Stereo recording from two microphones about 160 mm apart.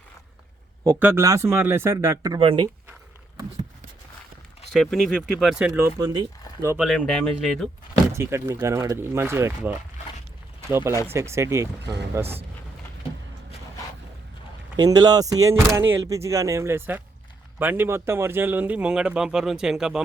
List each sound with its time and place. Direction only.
0.9 s speech: 15° right (ahead or behind)
2.4 s speech: 35° right (ahead or behind)
4.7 s speech: centre (ahead or behind)
6.0 s speech: 25° right (ahead or behind)
6.7 s speech: centre (ahead or behind)
8.1 s speech: 15° right (ahead or behind)
11.8 s speech: 90° right
12.1 s speech: 15° right (ahead or behind)
14.8 s speech: 25° right (ahead or behind); by 20.0 s 5° right (ahead or behind)